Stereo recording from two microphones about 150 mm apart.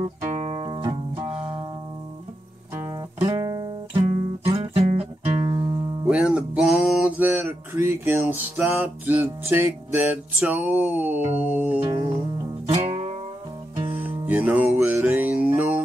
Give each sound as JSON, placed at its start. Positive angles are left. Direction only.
{"t": 0.3, "sound": "music", "side_deg": -40}
{"t": 2.7, "sound": "music", "side_deg": -15}
{"t": 4.7, "sound": "music", "side_deg": -35}
{"t": 6.0, "sound": "music", "side_deg": -5}
{"t": 12.6, "sound": "music", "side_deg": -40}
{"t": 14.2, "sound": "music", "side_deg": -10}